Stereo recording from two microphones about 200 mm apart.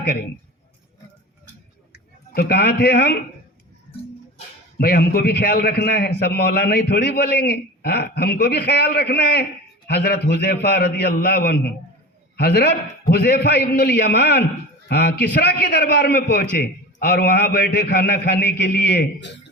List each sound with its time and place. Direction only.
0.0 s a man's voice: 50° left (ahead or behind)
1.9 s speech: 50° left (ahead or behind)
4.8 s a man's voice: 50° left (ahead or behind)